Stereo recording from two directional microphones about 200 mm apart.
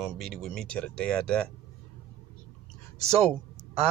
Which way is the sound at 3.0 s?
30° right (ahead or behind).